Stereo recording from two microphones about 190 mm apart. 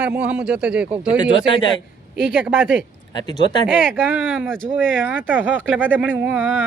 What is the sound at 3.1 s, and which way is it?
Speech, 20° left (ahead or behind).